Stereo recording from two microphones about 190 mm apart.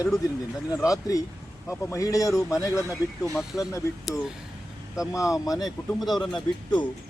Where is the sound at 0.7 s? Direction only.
20° left (ahead or behind).